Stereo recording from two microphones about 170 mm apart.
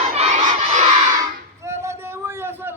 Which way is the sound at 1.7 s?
15° right (ahead or behind).